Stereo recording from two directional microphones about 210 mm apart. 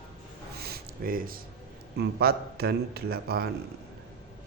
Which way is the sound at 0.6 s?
45° right (ahead or behind).